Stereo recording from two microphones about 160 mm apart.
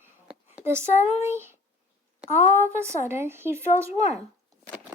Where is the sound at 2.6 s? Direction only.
15° right (ahead or behind).